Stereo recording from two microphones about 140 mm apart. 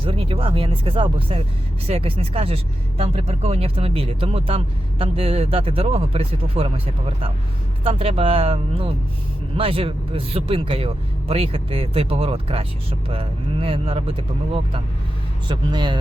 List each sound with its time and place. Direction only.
0.0 s speech: 40° right (ahead or behind)